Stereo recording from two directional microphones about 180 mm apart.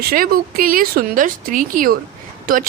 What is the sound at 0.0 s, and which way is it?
Speech, 55° right (ahead or behind).